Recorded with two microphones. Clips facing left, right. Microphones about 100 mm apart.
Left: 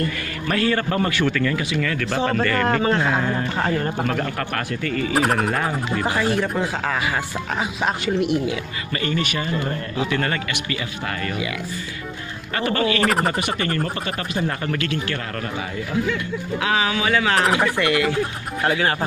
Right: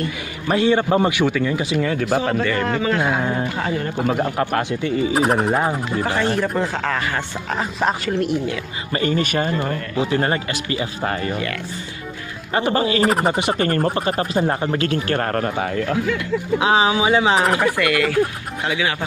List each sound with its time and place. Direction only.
0.5 s a man's voice: 20° right (ahead or behind)
1.6 s speech: 25° right (ahead or behind)
2.4 s a man's voice: 45° left (ahead or behind)
3.0 s a man's voice: 15° right (ahead or behind)
3.5 s speech: 35° left (ahead or behind)
4.2 s speech: 25° right (ahead or behind)
5.1 s speech: 5° right (ahead or behind)
8.9 s speech: 35° right (ahead or behind)
9.9 s speech: 30° right (ahead or behind)
12.5 s speech: 30° right (ahead or behind); by 15.7 s 45° right (ahead or behind)
16.5 s speech: 25° right (ahead or behind)
17.4 s speech: centre (ahead or behind)
17.7 s speech: 25° left (ahead or behind)
18.6 s a man's voice: 45° left (ahead or behind)